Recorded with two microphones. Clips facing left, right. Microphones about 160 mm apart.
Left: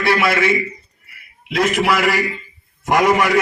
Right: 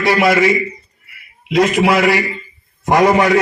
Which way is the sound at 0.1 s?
35° right (ahead or behind).